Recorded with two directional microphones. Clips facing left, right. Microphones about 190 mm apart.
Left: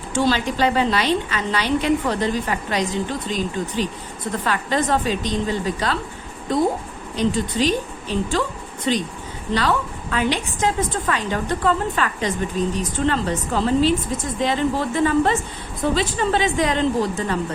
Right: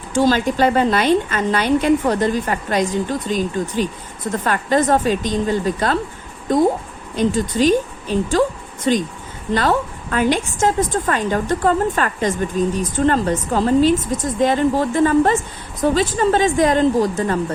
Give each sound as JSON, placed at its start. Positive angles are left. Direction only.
{"t": 0.2, "sound": "a woman's voice", "side_deg": -45}
{"t": 7.2, "sound": "a woman's voice", "side_deg": -45}